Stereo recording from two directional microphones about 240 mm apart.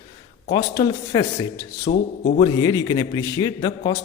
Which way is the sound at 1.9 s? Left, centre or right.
Left.